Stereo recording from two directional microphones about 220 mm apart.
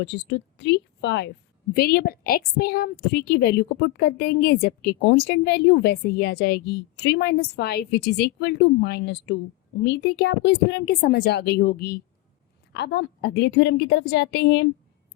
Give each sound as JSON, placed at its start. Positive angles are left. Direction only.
{"t": 0.0, "sound": "a woman's voice", "side_deg": 50}